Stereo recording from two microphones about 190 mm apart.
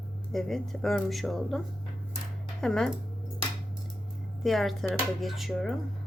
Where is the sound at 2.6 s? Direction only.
5° left (ahead or behind).